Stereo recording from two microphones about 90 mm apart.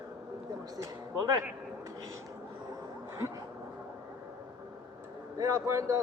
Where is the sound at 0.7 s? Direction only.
40° right (ahead or behind).